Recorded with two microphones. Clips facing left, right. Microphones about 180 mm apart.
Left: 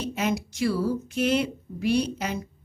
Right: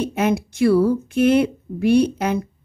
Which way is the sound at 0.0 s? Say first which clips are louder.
Right 7 dB; 55° right (ahead or behind).